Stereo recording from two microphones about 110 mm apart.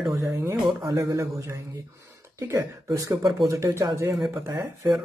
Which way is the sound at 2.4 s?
25° right (ahead or behind).